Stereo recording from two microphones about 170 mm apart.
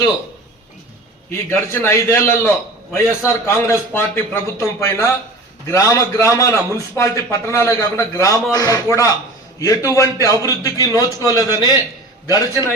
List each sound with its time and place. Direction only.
1.3 s a man's voice: 15° left (ahead or behind)